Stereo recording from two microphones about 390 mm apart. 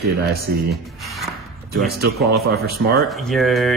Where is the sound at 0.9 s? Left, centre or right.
Centre.